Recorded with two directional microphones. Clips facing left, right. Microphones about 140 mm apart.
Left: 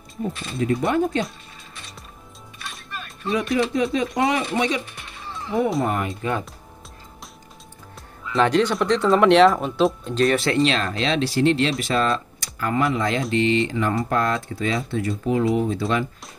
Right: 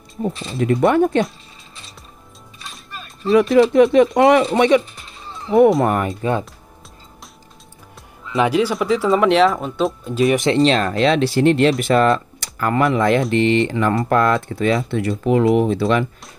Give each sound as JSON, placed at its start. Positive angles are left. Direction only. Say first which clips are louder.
{"t": 0.6, "sound": "speech", "louder": "right 6 dB", "side_deg": -65}
{"t": 3.3, "sound": "speech", "louder": "right 10 dB", "side_deg": -65}
{"t": 6.2, "sound": "speech", "louder": "right 5 dB", "side_deg": -35}
{"t": 8.3, "sound": "speech", "louder": "right 2 dB", "side_deg": -5}
{"t": 10.3, "sound": "speech", "louder": "right 4 dB", "side_deg": -20}
{"t": 10.6, "sound": "speech", "louder": "right 6 dB", "side_deg": -45}